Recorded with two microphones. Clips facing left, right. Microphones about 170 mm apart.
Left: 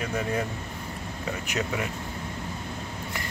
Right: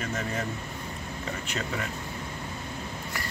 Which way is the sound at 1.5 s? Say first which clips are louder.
Left 4 dB; 15° left (ahead or behind).